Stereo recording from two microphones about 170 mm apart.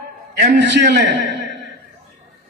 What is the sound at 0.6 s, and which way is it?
Speech, 85° right.